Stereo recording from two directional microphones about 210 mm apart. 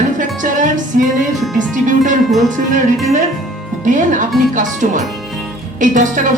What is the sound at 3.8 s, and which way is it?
A woman's voice, 35° right (ahead or behind).